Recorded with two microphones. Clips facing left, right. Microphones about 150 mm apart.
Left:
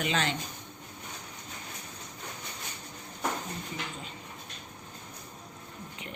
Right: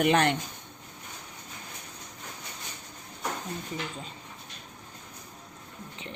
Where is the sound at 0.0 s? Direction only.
60° right (ahead or behind).